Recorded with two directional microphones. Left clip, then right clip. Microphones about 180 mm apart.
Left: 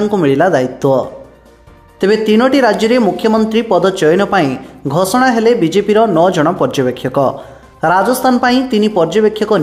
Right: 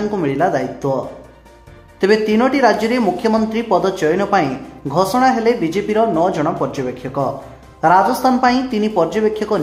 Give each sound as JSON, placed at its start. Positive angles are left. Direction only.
{"t": 0.1, "sound": "speech", "side_deg": 35}
{"t": 7.8, "sound": "speech", "side_deg": 30}